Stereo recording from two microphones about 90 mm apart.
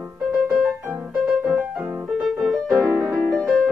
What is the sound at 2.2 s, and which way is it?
Music, centre (ahead or behind).